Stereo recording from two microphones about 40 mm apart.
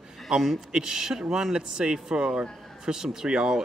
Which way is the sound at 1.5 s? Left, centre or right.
Right.